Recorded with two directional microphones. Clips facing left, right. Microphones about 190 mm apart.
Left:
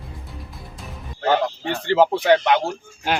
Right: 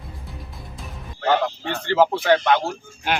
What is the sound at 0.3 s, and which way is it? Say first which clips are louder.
Music: even; centre (ahead or behind).